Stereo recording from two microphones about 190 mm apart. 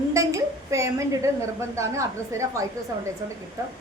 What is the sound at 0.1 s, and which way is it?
A woman's voice, 15° right (ahead or behind).